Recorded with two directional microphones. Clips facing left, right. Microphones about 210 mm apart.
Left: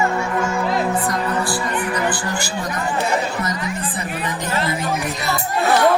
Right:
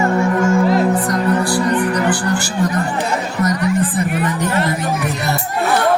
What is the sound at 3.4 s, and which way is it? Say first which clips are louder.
Music: right 8 dB; 55° right (ahead or behind).